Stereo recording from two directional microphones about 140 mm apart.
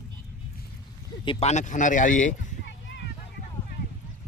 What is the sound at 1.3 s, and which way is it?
Speech, 50° left (ahead or behind).